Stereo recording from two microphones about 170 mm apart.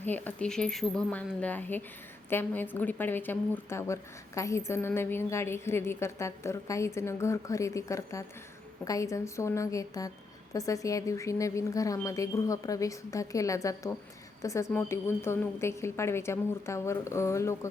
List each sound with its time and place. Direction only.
0.0 s a woman's voice: 10° left (ahead or behind)